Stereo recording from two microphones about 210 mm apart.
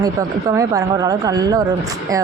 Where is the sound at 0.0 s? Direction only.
15° right (ahead or behind).